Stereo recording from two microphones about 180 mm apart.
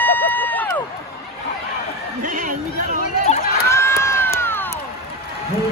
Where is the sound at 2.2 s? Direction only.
45° right (ahead or behind).